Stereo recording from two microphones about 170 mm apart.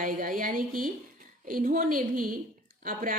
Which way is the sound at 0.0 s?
55° right (ahead or behind).